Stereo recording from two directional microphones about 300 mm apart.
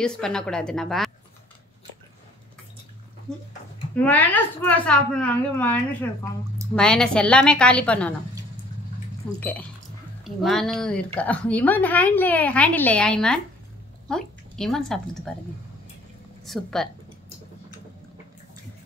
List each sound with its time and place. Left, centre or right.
0.0 s a woman's voice: centre
3.3 s a woman's voice: centre
9.4 s a woman's voice: centre
16.4 s a woman's voice: centre